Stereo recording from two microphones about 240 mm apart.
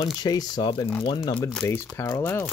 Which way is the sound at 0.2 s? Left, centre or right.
Centre.